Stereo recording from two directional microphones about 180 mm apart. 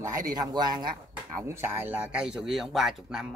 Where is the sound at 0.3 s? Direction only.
20° right (ahead or behind).